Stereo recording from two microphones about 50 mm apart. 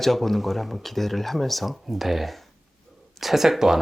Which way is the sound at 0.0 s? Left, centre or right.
Centre.